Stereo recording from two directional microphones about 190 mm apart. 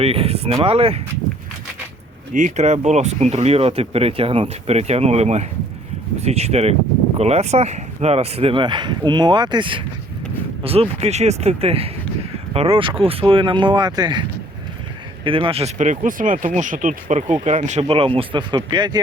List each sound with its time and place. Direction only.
0.0 s speech: 30° right (ahead or behind)
2.3 s speech: 40° right (ahead or behind); by 18.9 s 20° right (ahead or behind)